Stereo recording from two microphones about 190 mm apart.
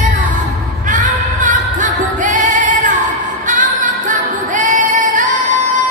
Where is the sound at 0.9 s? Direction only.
40° right (ahead or behind).